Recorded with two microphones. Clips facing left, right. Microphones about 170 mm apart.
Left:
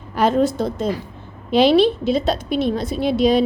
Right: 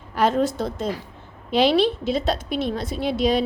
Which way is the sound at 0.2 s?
20° left (ahead or behind).